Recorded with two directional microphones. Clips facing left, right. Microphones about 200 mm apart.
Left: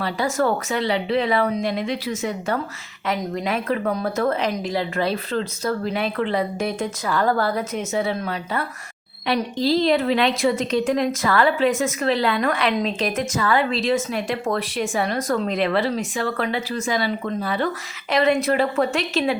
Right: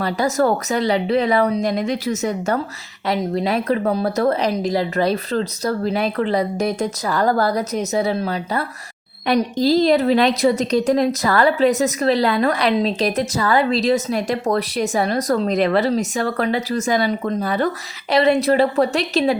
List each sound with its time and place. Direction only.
0.0 s a woman's voice: 40° right (ahead or behind)